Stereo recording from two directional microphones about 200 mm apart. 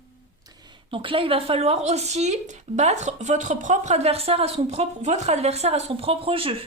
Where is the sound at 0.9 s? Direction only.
25° right (ahead or behind).